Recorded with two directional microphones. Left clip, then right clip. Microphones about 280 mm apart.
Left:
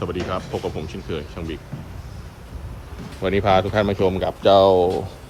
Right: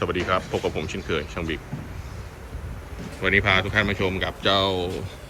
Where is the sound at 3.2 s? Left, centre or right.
Centre.